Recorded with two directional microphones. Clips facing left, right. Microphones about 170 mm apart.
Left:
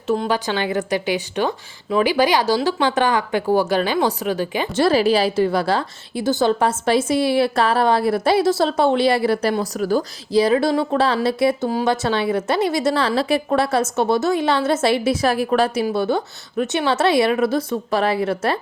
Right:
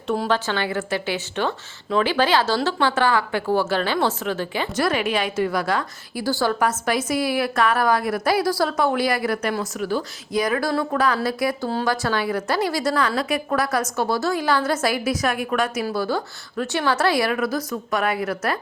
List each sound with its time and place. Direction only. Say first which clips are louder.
0.3 s a woman's voice: left 2 dB; 15° left (ahead or behind)
4.7 s a woman's voice: left 7 dB; 30° left (ahead or behind)